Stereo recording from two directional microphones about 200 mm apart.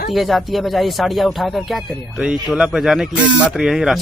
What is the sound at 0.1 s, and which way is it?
A man's voice, centre (ahead or behind).